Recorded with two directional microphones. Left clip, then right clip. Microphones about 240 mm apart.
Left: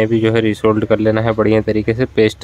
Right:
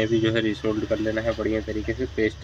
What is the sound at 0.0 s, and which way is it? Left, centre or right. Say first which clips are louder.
Speech: left 8 dB; left.